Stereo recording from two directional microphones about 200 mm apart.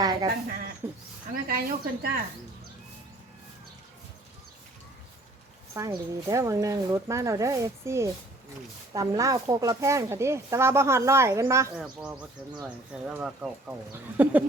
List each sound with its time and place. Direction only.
0.0 s speech: 20° right (ahead or behind)
1.3 s a woman's voice: 50° right (ahead or behind)
5.7 s speech: 15° right (ahead or behind)
11.8 s speech: 5° right (ahead or behind)